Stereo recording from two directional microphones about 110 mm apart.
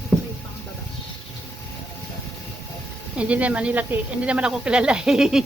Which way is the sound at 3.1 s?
10° right (ahead or behind).